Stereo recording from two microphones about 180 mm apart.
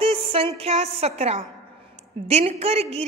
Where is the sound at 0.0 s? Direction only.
30° right (ahead or behind).